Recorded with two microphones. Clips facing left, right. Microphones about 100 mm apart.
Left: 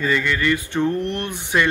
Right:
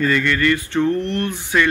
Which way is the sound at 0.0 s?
10° left (ahead or behind).